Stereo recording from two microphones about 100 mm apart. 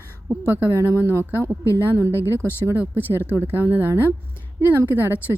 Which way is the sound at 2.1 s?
25° left (ahead or behind).